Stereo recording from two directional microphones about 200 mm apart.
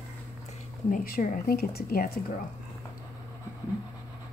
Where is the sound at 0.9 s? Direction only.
45° left (ahead or behind).